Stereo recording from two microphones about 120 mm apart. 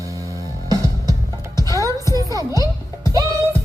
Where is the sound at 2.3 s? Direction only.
30° right (ahead or behind).